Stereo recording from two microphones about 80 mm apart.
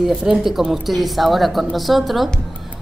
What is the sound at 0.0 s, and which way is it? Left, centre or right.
A woman's voice, centre.